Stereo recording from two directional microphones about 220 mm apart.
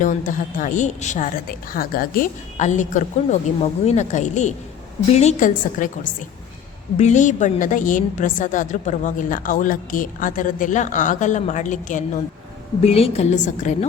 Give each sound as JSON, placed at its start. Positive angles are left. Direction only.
{"t": 0.0, "sound": "a woman's voice", "side_deg": 35}